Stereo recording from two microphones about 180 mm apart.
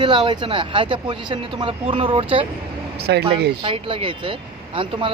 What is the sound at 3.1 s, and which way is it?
Speech, 70° right (ahead or behind).